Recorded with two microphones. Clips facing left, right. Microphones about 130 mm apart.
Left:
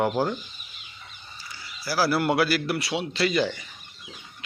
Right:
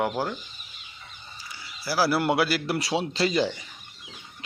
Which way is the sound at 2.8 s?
35° right (ahead or behind).